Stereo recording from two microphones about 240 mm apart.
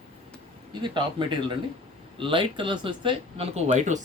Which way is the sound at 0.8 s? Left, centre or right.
Centre.